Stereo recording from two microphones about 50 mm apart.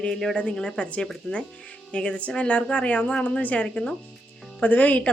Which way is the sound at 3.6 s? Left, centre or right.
Centre.